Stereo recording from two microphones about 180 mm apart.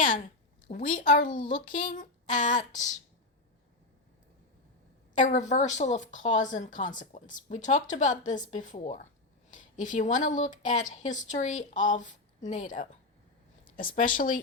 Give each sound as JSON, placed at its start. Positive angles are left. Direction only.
{"t": 0.7, "sound": "speech", "side_deg": 45}
{"t": 1.3, "sound": "speech", "side_deg": 25}
{"t": 1.7, "sound": "speech", "side_deg": 45}
{"t": 5.1, "sound": "speech", "side_deg": 45}